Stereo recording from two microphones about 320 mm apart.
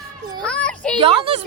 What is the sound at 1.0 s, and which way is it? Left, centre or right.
Speech, centre.